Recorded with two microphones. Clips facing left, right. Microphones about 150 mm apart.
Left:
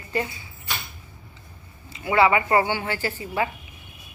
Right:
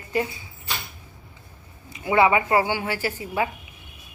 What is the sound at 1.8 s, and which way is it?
A woman's voice, 20° right (ahead or behind).